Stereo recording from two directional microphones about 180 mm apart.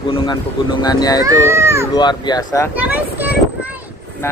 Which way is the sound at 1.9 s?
25° left (ahead or behind).